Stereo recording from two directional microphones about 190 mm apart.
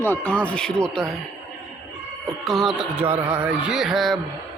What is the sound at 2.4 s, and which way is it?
Speech, centre (ahead or behind).